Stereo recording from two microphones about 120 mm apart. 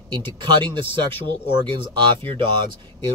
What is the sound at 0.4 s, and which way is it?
Speech, 40° right (ahead or behind).